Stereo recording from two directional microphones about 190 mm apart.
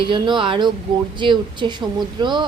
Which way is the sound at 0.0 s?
25° right (ahead or behind).